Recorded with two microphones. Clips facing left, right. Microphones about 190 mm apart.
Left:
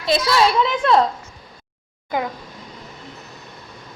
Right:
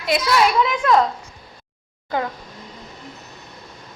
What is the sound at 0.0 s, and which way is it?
Speech, 25° left (ahead or behind).